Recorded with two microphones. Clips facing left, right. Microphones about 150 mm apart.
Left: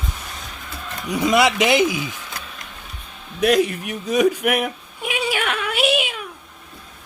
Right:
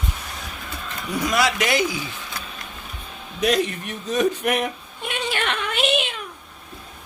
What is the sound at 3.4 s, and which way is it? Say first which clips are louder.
Speech: left 4 dB; 5° left (ahead or behind).